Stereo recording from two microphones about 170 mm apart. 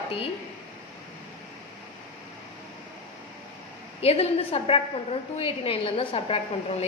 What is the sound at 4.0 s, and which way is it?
A woman's voice, 35° left (ahead or behind).